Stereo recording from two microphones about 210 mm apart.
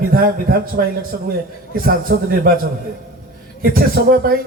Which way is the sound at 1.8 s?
45° right (ahead or behind).